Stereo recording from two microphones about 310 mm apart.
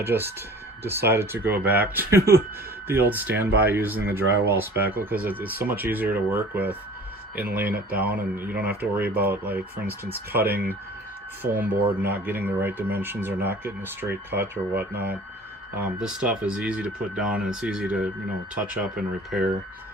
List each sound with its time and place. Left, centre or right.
0.0 s speech: centre